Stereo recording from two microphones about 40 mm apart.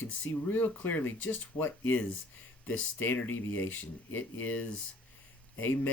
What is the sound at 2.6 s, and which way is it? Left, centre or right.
Speech, left.